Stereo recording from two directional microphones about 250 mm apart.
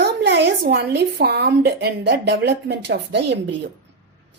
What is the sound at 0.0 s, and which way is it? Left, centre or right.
A woman's voice, right.